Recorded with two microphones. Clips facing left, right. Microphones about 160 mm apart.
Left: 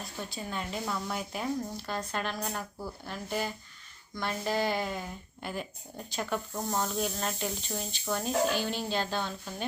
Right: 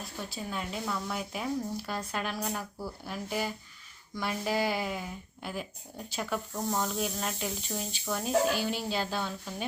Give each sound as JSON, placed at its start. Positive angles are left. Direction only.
{"t": 0.0, "sound": "speech", "side_deg": -5}